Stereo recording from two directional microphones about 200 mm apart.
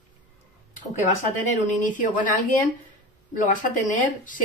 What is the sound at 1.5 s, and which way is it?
Speech, 40° left (ahead or behind).